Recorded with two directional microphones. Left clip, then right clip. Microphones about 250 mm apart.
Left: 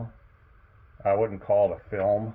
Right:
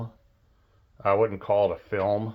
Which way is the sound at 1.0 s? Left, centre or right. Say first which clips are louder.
Right 1 dB; centre.